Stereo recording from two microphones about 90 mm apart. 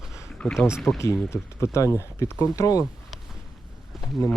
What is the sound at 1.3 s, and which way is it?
Speech, 30° left (ahead or behind).